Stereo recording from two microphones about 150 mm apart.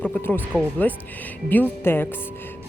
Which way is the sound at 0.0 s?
10° left (ahead or behind).